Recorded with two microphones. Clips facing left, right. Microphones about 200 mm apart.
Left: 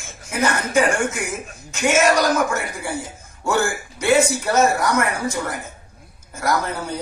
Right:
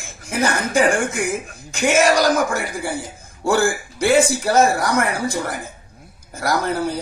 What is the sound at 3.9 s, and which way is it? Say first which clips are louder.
Speech: even; 35° right (ahead or behind).